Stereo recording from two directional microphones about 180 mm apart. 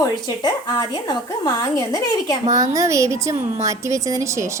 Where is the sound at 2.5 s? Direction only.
20° right (ahead or behind).